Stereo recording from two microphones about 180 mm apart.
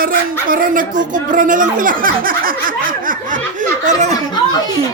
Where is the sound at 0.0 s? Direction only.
50° right (ahead or behind).